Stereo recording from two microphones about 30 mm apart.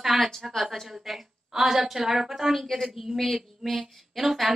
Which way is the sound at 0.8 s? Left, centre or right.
Centre.